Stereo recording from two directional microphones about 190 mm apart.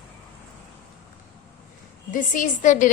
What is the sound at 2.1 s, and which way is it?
Speech, 45° left (ahead or behind).